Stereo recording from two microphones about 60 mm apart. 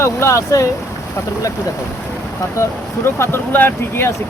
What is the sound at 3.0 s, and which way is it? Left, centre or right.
Speech, left.